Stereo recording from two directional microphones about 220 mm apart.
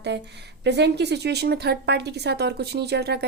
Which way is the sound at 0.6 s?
50° right (ahead or behind).